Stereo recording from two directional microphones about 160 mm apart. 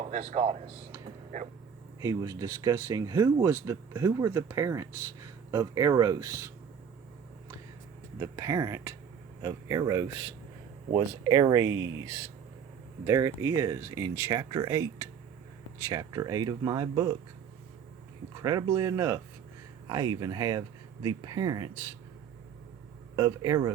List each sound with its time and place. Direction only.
0.0 s speech: 45° right (ahead or behind)
2.0 s speech: 20° right (ahead or behind)
8.2 s speech: 20° right (ahead or behind)
18.4 s speech: 20° right (ahead or behind)
23.1 s speech: 20° right (ahead or behind)